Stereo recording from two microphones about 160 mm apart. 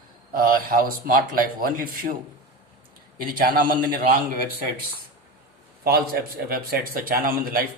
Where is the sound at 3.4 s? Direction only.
65° right (ahead or behind).